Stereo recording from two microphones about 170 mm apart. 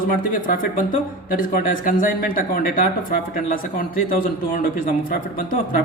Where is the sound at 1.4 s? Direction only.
55° left (ahead or behind).